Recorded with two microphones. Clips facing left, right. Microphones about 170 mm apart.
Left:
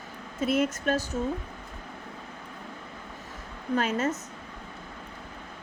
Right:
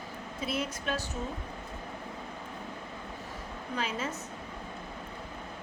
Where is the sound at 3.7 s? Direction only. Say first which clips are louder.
Left 8 dB; 50° left (ahead or behind).